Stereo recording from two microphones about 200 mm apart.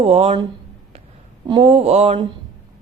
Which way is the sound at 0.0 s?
30° right (ahead or behind).